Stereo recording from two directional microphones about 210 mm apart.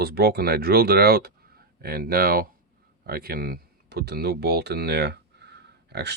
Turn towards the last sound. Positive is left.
turn(degrees=-50)  # may be behind; listen again after turning